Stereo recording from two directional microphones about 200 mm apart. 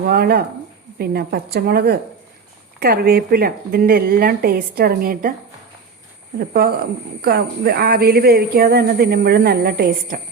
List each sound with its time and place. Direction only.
0.1 s a woman's voice: 50° right (ahead or behind)
6.5 s a woman's voice: 50° right (ahead or behind)